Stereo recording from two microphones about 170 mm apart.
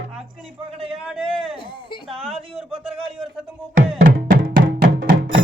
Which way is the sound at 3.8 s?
55° right (ahead or behind).